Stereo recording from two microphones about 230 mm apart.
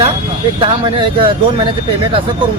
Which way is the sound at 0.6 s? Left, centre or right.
Right.